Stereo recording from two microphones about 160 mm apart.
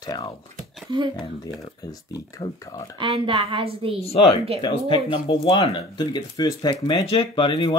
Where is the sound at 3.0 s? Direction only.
35° right (ahead or behind).